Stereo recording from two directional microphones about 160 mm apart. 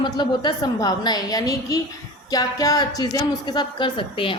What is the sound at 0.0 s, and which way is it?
A woman's voice, 30° left (ahead or behind).